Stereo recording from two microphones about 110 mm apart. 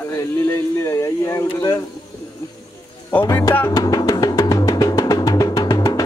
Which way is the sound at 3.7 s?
35° left (ahead or behind).